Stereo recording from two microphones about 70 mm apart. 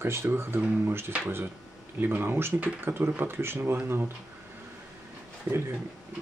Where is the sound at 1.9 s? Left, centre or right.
Right.